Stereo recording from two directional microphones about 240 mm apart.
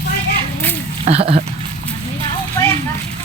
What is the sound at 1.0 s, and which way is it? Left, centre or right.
Speech, right.